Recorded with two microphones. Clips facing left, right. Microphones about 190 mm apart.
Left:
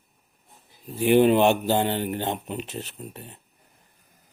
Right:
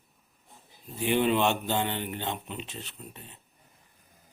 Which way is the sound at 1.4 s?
5° left (ahead or behind).